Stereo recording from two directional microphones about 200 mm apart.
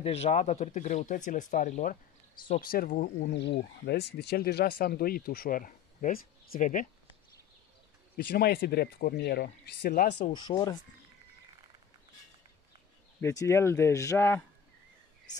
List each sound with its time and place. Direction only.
0.0 s speech: 30° left (ahead or behind)
8.3 s speech: 50° left (ahead or behind)
10.3 s speech: 20° left (ahead or behind)
13.2 s speech: 15° left (ahead or behind)